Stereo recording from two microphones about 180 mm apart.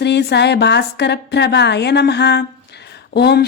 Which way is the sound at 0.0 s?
70° left (ahead or behind).